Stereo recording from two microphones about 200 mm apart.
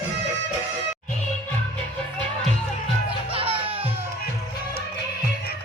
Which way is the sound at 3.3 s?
25° right (ahead or behind).